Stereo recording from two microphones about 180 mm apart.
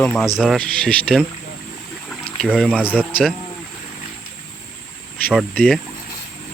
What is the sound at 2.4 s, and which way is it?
Speech, centre (ahead or behind).